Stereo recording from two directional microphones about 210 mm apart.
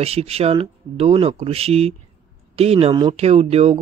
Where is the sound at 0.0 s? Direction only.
30° right (ahead or behind).